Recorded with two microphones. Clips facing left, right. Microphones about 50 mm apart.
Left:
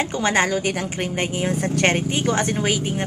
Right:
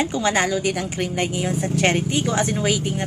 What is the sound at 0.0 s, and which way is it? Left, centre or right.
Speech, left.